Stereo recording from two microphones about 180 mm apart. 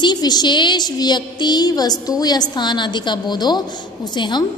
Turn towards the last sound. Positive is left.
turn(degrees=25)  # may be behind; listen again after turning